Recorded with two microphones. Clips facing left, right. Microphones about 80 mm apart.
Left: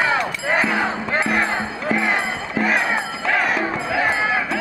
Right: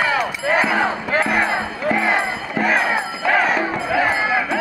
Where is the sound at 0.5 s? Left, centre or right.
Centre.